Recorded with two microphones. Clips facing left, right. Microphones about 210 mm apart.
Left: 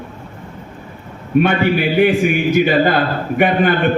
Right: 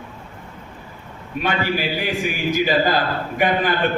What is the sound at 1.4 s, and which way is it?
A man's voice, 60° left (ahead or behind).